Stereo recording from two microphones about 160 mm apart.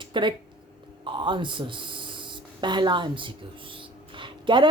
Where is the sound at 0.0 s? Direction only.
30° right (ahead or behind).